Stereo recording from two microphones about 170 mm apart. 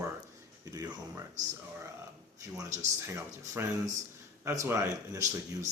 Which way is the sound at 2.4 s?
20° right (ahead or behind).